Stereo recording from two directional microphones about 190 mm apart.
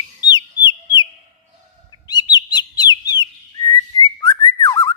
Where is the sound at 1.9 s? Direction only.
20° left (ahead or behind).